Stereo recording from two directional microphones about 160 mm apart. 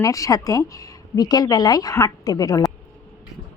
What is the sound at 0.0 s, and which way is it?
Speech, 20° left (ahead or behind).